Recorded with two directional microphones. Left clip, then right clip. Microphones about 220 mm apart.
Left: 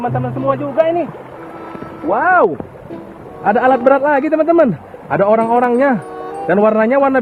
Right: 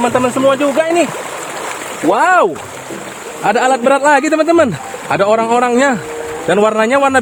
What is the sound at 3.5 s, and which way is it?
A man's voice, 75° right (ahead or behind).